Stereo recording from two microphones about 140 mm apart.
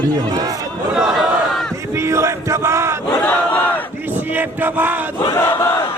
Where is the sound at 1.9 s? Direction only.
20° right (ahead or behind).